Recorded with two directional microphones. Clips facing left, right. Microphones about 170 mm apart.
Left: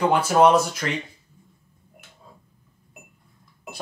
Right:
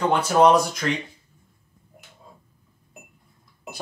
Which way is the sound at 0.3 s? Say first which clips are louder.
Right 1 dB; 5° left (ahead or behind).